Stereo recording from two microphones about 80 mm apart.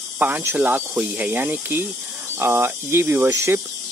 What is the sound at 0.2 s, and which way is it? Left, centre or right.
Speech, right.